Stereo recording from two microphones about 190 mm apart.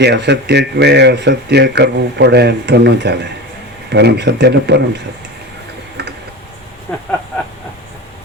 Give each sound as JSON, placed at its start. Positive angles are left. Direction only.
{"t": 0.0, "sound": "speech", "side_deg": -60}